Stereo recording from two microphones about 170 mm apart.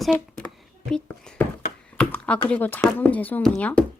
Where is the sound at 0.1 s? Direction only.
5° left (ahead or behind).